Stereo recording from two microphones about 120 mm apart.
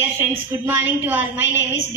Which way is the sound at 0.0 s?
20° right (ahead or behind).